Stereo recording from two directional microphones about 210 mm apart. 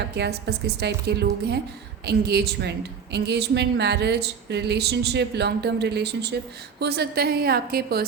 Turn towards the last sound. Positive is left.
turn(degrees=-45)  # may be behind; listen again after turning